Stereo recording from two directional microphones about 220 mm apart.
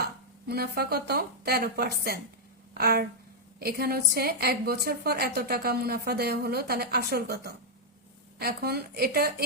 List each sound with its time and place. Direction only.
0.0 s a woman's voice: 45° right (ahead or behind)